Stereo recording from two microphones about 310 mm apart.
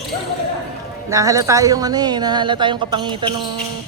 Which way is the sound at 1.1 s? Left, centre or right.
Centre.